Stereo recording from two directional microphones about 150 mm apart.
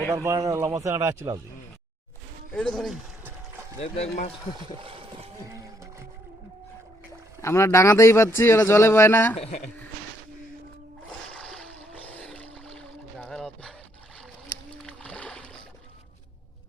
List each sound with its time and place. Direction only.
0.1 s speech: 20° right (ahead or behind)
2.5 s speech: 5° left (ahead or behind)
3.8 s speech: 45° left (ahead or behind)
4.5 s a sound: 35° right (ahead or behind)
5.5 s boat: 20° right (ahead or behind)
7.4 s speech: 20° left (ahead or behind)
11.3 s a sound: 5° left (ahead or behind)
14.8 s boat: 5° left (ahead or behind)